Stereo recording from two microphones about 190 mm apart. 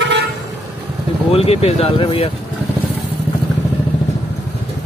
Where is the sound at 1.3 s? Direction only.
30° left (ahead or behind).